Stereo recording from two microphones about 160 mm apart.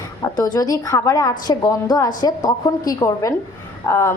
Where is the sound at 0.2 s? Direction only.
25° left (ahead or behind).